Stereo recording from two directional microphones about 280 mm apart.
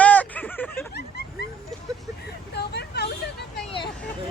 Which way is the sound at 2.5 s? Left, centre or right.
Left.